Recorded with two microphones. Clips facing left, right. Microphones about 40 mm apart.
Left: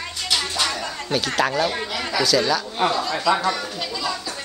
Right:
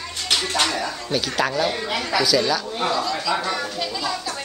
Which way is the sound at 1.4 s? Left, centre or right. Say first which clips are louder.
Left 1 dB; centre.